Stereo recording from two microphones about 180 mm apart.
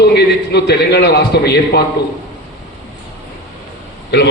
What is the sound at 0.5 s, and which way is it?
A man's voice, 65° left (ahead or behind).